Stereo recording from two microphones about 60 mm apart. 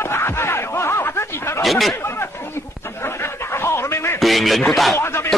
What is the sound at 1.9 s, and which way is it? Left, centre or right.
Chatter, left.